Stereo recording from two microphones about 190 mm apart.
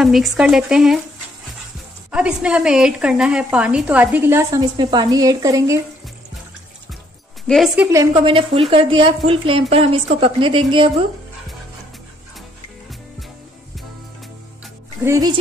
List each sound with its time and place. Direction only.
0.0 s speech: centre (ahead or behind)
2.0 s speech: 5° right (ahead or behind)
7.4 s speech: centre (ahead or behind)
7.9 s a woman's voice: 20° right (ahead or behind)
15.0 s speech: 20° right (ahead or behind)